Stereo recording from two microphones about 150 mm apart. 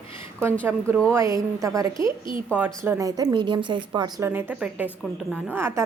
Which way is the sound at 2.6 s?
20° right (ahead or behind).